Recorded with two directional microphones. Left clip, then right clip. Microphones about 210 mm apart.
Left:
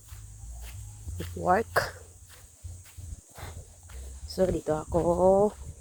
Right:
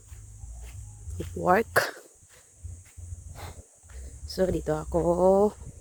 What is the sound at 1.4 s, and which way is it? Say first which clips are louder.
Speech: right 2 dB; 35° right (ahead or behind).